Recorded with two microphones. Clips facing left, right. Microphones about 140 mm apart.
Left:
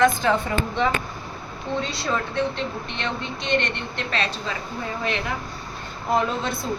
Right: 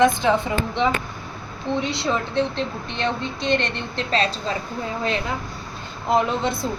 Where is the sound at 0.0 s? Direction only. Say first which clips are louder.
Right 2 dB; 15° right (ahead or behind).